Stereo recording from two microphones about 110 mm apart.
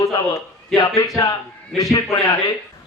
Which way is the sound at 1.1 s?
30° left (ahead or behind).